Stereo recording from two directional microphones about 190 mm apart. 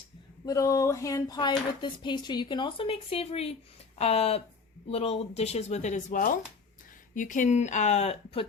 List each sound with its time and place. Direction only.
0.4 s speech: 15° left (ahead or behind); by 8.4 s 30° left (ahead or behind)